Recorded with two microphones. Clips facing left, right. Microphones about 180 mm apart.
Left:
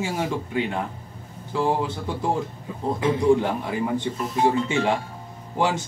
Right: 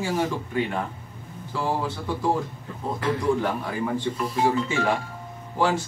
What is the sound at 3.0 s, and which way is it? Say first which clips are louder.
A man's voice: left 4 dB; 20° left (ahead or behind).